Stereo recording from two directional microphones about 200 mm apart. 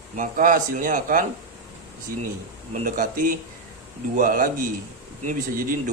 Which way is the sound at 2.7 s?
40° right (ahead or behind).